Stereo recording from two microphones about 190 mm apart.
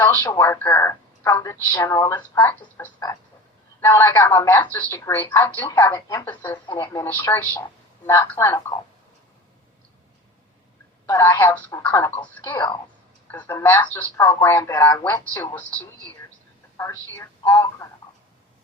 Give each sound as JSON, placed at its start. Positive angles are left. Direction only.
{"t": 0.0, "sound": "a woman's voice", "side_deg": 10}
{"t": 11.0, "sound": "speech", "side_deg": 20}
{"t": 11.5, "sound": "a woman's voice", "side_deg": 5}
{"t": 17.4, "sound": "speech", "side_deg": 20}